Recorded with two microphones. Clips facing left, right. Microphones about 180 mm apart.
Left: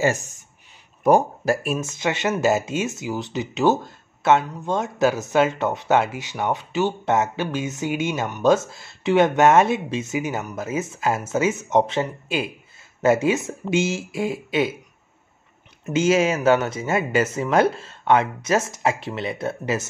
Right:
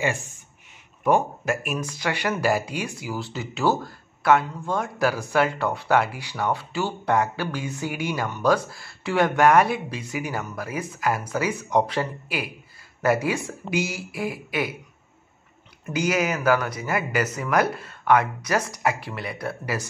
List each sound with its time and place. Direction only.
0.0 s speech: 40° left (ahead or behind); by 14.8 s 25° left (ahead or behind)
15.8 s speech: 25° left (ahead or behind)